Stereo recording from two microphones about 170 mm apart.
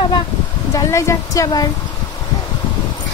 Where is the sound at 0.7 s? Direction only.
20° left (ahead or behind).